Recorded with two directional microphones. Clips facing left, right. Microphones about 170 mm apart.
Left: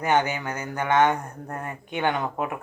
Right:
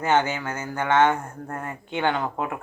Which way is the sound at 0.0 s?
15° left (ahead or behind).